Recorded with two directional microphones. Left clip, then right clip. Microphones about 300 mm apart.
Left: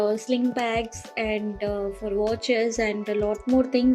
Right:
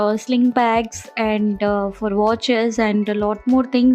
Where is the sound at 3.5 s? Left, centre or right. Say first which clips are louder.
Right 4 dB; centre.